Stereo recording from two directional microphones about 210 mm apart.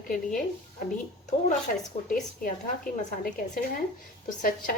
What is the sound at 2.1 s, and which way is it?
Speech, 40° left (ahead or behind).